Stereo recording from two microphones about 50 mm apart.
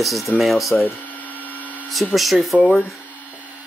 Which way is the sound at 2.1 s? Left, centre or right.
Centre.